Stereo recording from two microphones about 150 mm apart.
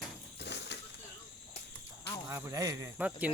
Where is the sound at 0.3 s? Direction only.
90° left.